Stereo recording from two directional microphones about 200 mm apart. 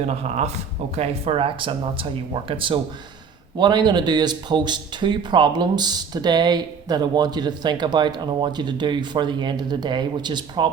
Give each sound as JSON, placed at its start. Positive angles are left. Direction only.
{"t": 0.0, "sound": "speech", "side_deg": -35}